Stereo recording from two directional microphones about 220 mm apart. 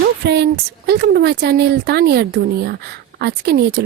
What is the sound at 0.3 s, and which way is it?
Speech, 50° right (ahead or behind).